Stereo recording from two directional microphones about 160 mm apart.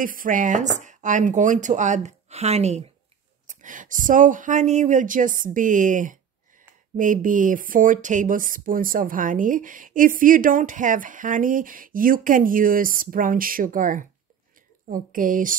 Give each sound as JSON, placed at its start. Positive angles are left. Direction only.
{"t": 0.0, "sound": "speech", "side_deg": -60}
{"t": 3.4, "sound": "speech", "side_deg": -55}